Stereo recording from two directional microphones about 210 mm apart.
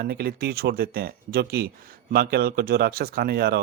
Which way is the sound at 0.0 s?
50° right (ahead or behind).